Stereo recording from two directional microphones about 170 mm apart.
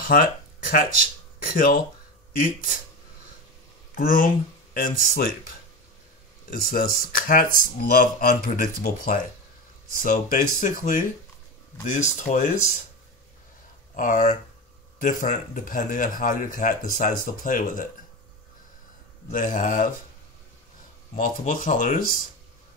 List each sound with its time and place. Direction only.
0.0 s a man's voice: 55° left (ahead or behind)
3.9 s speech: 55° left (ahead or behind)
6.5 s a man's voice: 55° left (ahead or behind)
13.9 s a man's voice: 50° left (ahead or behind)
19.3 s a man's voice: 50° left (ahead or behind)
21.1 s a man's voice: 50° left (ahead or behind)